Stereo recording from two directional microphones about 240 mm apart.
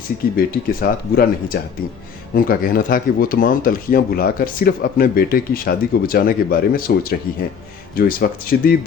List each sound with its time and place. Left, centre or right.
0.3 s speech: left